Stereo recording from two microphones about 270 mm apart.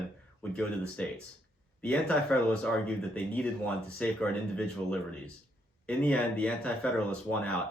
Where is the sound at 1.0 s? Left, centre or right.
Centre.